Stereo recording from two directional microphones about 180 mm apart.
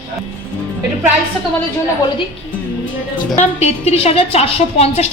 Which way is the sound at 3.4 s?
35° left (ahead or behind).